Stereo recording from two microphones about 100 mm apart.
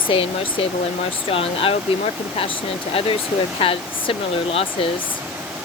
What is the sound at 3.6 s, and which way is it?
Speech, 70° left (ahead or behind).